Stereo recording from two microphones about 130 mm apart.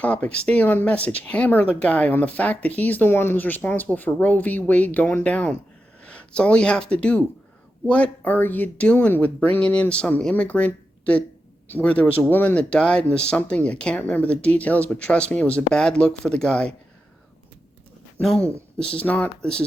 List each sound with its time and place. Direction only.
0.0 s speech: 10° left (ahead or behind)
18.2 s speech: 5° left (ahead or behind)